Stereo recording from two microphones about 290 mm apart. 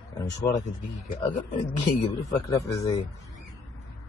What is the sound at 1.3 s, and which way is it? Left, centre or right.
Speech, left.